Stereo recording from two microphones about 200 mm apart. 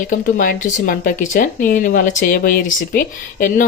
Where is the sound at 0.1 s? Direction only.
45° left (ahead or behind).